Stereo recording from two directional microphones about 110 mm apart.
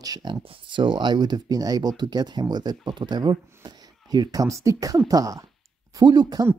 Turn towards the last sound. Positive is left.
turn(degrees=-35)  # may be behind; listen again after turning